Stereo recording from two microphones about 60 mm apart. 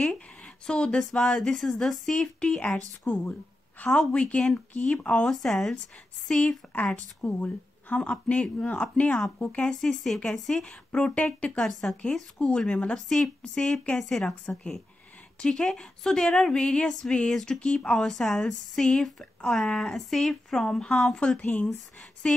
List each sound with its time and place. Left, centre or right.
0.7 s speech: centre
3.1 s a woman's voice: left
5.3 s speech: centre; by 9.2 s left
9.6 s speech: centre
10.6 s speech: centre
11.6 s speech: centre
15.4 s speech: centre